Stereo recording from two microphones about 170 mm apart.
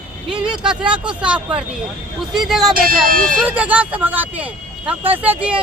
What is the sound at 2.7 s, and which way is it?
Speech, 55° right (ahead or behind).